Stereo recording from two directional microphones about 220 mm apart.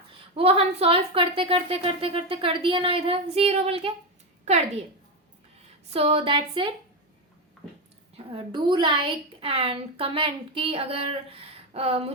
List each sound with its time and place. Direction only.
0.1 s a woman's voice: 25° right (ahead or behind)
5.9 s a woman's voice: 25° right (ahead or behind)
8.1 s a woman's voice: 25° right (ahead or behind)